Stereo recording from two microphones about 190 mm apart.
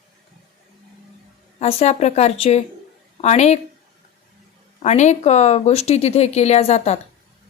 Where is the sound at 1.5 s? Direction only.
35° left (ahead or behind).